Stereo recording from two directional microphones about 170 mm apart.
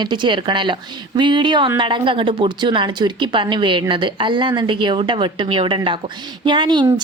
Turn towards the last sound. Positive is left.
turn(degrees=-25)  # may be behind; listen again after turning